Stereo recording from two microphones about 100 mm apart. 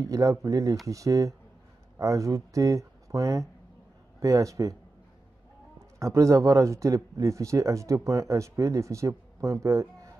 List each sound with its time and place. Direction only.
0.0 s a man's voice: 35° right (ahead or behind)
5.8 s a man's voice: 30° right (ahead or behind)